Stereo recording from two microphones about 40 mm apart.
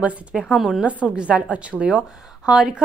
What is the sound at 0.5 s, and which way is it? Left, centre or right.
Speech, centre.